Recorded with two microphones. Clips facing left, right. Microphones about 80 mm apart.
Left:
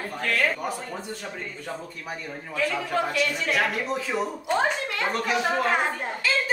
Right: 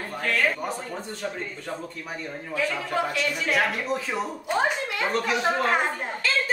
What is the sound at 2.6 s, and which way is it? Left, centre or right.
A woman's voice, centre.